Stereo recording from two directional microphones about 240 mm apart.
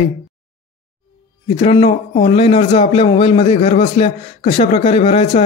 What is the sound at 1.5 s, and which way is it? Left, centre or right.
A man's voice, left.